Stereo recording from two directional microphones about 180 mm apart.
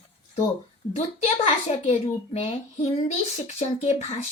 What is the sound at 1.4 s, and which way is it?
A child's voice, 35° left (ahead or behind).